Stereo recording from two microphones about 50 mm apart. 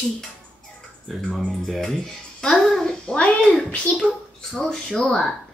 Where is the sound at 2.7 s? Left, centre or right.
Centre.